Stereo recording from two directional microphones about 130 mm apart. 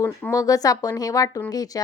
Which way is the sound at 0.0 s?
20° left (ahead or behind).